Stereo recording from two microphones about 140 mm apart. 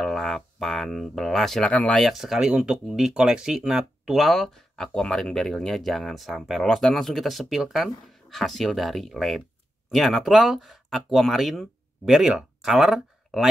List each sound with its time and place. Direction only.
0.0 s speech: 5° left (ahead or behind)